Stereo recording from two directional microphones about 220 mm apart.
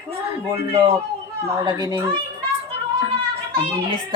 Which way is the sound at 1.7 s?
15° right (ahead or behind).